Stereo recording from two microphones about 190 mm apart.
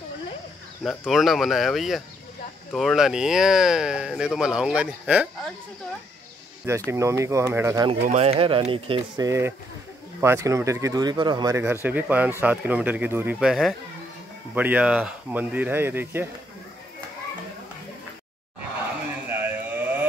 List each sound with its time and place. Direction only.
0.8 s speech: centre (ahead or behind)
6.9 s speech: 15° right (ahead or behind)
8.0 s speech: 35° right (ahead or behind); by 16.3 s 10° right (ahead or behind)
19.2 s a sound: 10° right (ahead or behind)